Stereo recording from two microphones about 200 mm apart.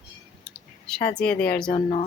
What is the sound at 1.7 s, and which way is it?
Speech, 25° left (ahead or behind).